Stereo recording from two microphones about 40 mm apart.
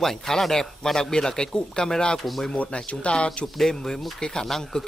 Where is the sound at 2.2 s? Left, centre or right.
Centre.